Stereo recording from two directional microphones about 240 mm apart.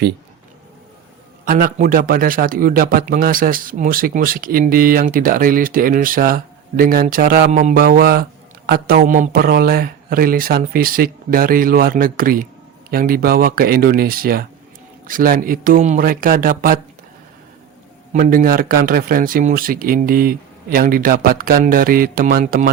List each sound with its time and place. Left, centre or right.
1.5 s speech: right
18.1 s speech: right